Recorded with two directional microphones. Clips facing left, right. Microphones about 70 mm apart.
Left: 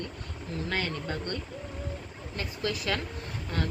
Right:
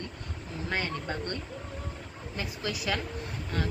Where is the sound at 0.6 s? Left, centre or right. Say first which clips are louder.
Right 1 dB; right.